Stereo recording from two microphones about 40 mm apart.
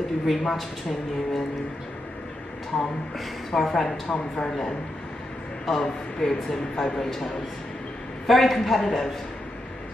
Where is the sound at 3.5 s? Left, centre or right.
Centre.